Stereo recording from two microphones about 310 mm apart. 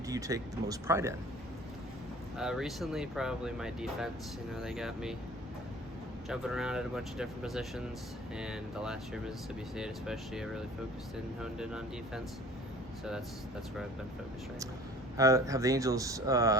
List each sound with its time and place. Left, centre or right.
0.1 s speech: centre
2.4 s speech: centre
6.2 s speech: centre
15.2 s speech: centre